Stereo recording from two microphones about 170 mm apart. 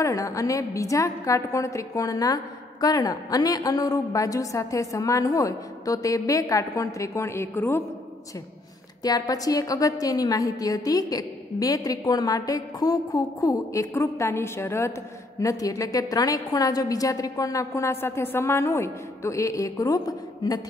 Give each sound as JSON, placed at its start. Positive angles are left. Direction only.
{"t": 0.0, "sound": "a woman's voice", "side_deg": 20}
{"t": 9.0, "sound": "a woman's voice", "side_deg": 20}